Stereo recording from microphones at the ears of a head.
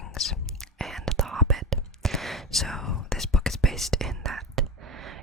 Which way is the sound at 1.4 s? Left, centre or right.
Right.